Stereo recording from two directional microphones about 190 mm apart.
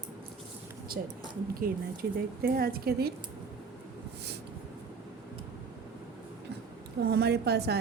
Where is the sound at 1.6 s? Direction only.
50° right (ahead or behind).